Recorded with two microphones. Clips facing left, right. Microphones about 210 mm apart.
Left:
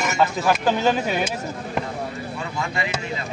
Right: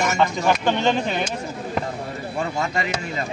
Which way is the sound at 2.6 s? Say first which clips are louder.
Left 1 dB; 45° right (ahead or behind).